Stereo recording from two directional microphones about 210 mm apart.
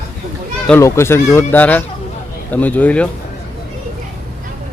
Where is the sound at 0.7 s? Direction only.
15° left (ahead or behind).